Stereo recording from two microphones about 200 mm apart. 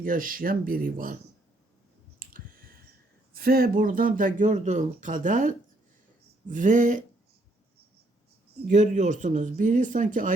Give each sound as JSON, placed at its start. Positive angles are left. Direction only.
{"t": 0.0, "sound": "speech", "side_deg": -45}
{"t": 2.1, "sound": "clicking", "side_deg": -45}
{"t": 3.3, "sound": "speech", "side_deg": -50}
{"t": 8.6, "sound": "speech", "side_deg": -40}